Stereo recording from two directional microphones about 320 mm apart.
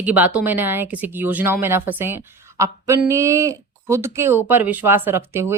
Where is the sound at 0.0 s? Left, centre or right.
Centre.